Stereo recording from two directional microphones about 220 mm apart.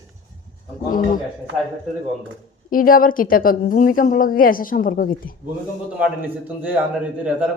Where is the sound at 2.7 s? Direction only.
40° left (ahead or behind).